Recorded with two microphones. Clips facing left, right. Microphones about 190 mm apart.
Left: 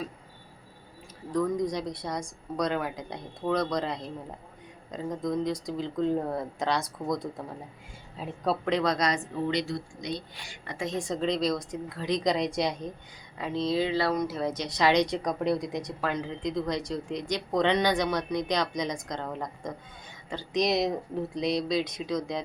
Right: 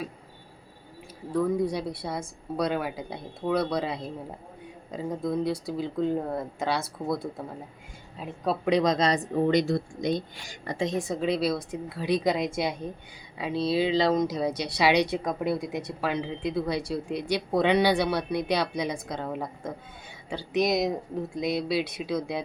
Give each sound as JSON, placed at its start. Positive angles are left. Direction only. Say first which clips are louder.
{"t": 1.3, "sound": "speech", "louder": "right 2 dB", "side_deg": -10}
{"t": 8.6, "sound": "a woman's voice", "louder": "right 5 dB", "side_deg": -15}
{"t": 9.3, "sound": "speech", "louder": "right 6 dB", "side_deg": -45}
{"t": 10.9, "sound": "speech", "louder": "left 1 dB", "side_deg": -5}